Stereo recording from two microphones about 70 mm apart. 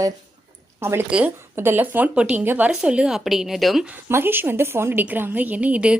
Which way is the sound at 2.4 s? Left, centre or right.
Right.